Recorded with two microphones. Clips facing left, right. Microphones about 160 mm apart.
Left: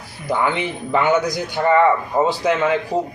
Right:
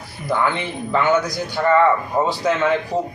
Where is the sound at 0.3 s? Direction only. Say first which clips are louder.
Left 1 dB; 15° left (ahead or behind).